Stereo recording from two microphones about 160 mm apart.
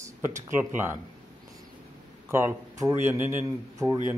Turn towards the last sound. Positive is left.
turn(degrees=-15)  # may be behind; listen again after turning